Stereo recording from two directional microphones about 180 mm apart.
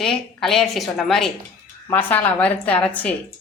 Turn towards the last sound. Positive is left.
turn(degrees=10)  # may be behind; listen again after turning